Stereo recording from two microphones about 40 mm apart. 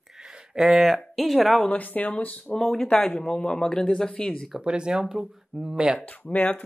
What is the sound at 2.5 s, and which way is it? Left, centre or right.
Speech, centre.